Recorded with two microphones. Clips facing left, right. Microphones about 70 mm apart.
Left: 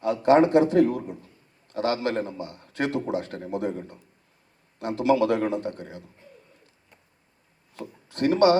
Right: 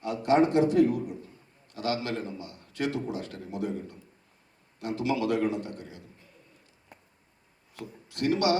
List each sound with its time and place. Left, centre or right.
0.0 s a man's voice: left
7.8 s speech: left